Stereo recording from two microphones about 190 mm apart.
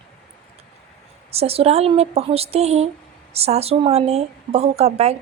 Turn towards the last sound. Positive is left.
turn(degrees=-35)  # may be behind; listen again after turning